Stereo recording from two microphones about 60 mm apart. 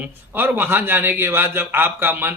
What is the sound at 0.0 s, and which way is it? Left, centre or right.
A man's voice, right.